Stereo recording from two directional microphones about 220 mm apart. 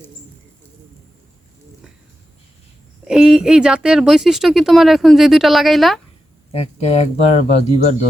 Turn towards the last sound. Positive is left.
turn(degrees=30)  # may be behind; listen again after turning